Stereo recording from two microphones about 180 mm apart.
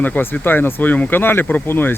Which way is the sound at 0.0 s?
10° left (ahead or behind).